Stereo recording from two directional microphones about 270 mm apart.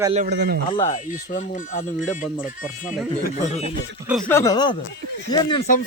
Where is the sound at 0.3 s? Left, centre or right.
Right.